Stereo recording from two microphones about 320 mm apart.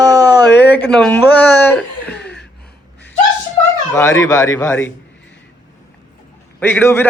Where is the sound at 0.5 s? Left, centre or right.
Left.